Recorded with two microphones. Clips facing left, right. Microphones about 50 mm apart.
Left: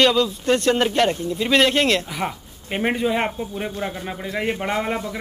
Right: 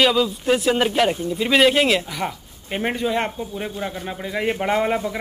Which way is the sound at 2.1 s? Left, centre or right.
Centre.